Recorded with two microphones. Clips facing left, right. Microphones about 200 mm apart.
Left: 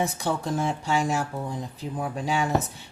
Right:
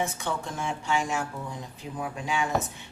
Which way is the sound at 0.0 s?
35° left (ahead or behind).